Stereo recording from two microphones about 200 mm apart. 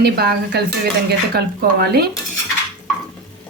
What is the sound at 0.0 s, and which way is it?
Speech, 50° right (ahead or behind).